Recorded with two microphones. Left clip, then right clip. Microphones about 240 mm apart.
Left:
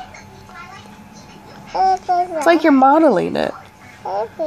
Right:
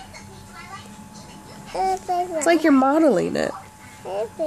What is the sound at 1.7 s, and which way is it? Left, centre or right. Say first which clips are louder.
Speech: left 7 dB; centre.